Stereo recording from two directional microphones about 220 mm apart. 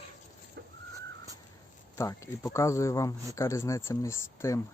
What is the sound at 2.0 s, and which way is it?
Speech, 15° left (ahead or behind).